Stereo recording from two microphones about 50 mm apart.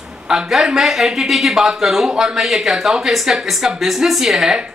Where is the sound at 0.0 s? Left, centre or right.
Centre.